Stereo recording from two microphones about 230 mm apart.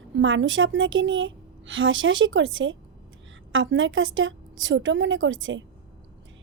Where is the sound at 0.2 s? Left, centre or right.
Right.